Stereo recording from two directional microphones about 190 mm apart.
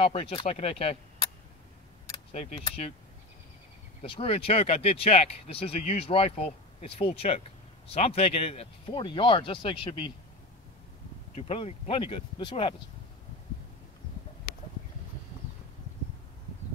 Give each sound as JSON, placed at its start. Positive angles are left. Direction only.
{"t": 0.0, "sound": "speech", "side_deg": 30}
{"t": 4.0, "sound": "speech", "side_deg": 30}
{"t": 11.3, "sound": "speech", "side_deg": 30}